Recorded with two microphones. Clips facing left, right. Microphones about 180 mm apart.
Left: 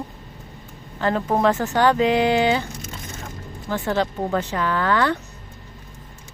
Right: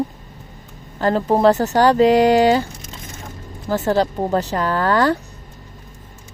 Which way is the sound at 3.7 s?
40° right (ahead or behind).